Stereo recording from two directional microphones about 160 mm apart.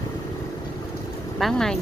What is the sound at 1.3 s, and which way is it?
Speech, centre (ahead or behind).